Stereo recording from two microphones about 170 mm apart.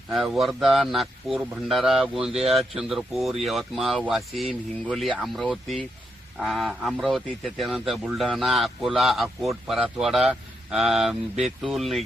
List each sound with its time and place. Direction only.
0.1 s a man's voice: centre (ahead or behind)